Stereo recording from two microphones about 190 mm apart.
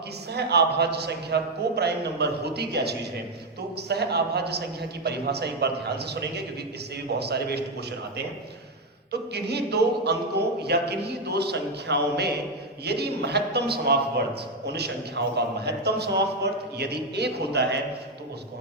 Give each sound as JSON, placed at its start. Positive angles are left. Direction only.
{"t": 0.3, "sound": "a man's voice", "side_deg": -60}
{"t": 9.3, "sound": "a man's voice", "side_deg": -60}